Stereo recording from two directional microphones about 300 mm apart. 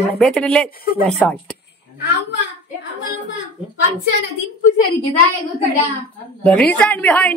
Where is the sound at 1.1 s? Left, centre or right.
Centre.